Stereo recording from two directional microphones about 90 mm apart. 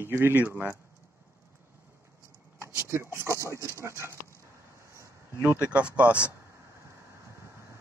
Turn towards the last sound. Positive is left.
turn(degrees=-15)  # may be behind; listen again after turning